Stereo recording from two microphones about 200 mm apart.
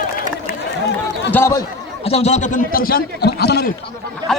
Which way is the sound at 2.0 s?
30° left (ahead or behind).